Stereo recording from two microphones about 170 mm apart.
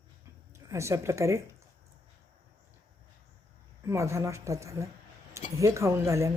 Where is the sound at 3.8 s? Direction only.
15° right (ahead or behind).